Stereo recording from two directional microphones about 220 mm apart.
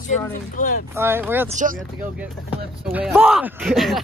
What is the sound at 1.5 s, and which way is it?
Speech, 35° right (ahead or behind).